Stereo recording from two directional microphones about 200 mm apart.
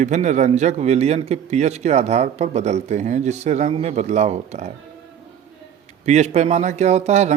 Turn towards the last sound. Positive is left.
turn(degrees=-35)  # may be behind; listen again after turning